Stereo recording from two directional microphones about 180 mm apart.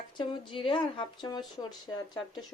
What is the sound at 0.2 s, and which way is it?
Speech, 25° left (ahead or behind).